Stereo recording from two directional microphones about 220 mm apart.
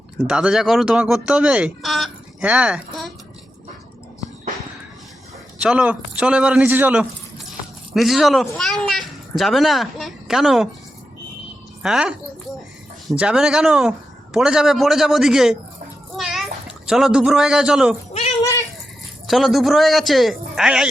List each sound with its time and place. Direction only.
0.2 s a child's voice: 5° right (ahead or behind)
5.6 s a child's voice: 5° right (ahead or behind)
11.8 s a child's voice: 5° right (ahead or behind)
16.1 s a sound: centre (ahead or behind)
18.1 s cat: 30° left (ahead or behind)
19.3 s a child's voice: centre (ahead or behind)